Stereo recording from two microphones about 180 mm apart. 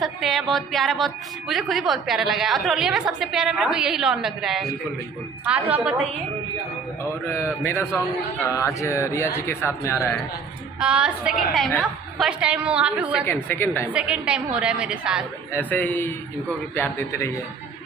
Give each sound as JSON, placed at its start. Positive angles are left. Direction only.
{"t": 0.0, "sound": "a woman's voice", "side_deg": 0}
{"t": 7.3, "sound": "speech", "side_deg": 15}
{"t": 10.8, "sound": "a woman's voice", "side_deg": -5}
{"t": 13.2, "sound": "speech", "side_deg": 10}
{"t": 13.9, "sound": "a woman's voice", "side_deg": -5}
{"t": 15.5, "sound": "speech", "side_deg": 10}